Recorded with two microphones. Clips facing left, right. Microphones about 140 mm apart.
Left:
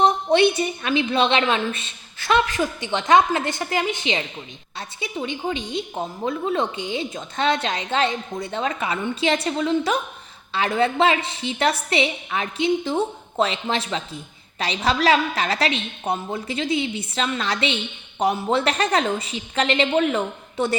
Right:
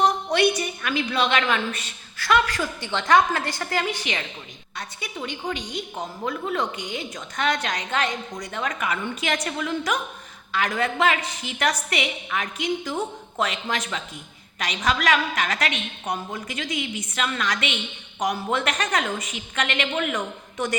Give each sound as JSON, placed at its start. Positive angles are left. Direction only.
{"t": 0.0, "sound": "a woman's voice", "side_deg": 25}